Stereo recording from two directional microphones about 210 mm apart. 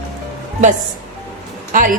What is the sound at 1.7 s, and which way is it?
Speech, 40° right (ahead or behind).